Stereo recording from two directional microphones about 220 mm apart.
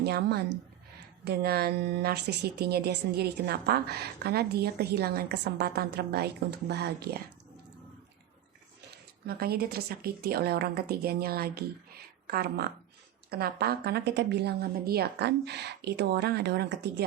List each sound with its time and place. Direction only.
0.0 s speech: 50° right (ahead or behind)
9.2 s speech: 45° right (ahead or behind)